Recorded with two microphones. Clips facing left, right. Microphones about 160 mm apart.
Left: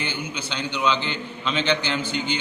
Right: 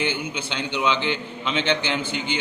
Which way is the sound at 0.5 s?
20° right (ahead or behind).